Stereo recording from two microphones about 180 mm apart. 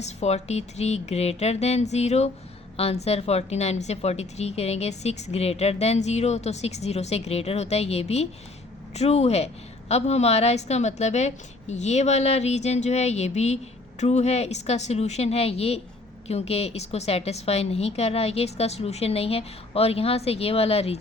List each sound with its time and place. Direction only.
0.0 s a woman's voice: 40° left (ahead or behind)